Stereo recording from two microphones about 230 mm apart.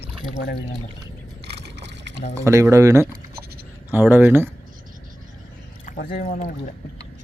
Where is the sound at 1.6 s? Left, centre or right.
Right.